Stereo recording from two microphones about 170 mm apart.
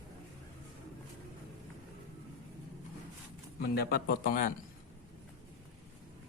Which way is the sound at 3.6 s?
65° left (ahead or behind).